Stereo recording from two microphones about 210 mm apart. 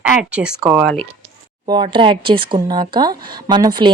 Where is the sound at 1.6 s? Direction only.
20° right (ahead or behind).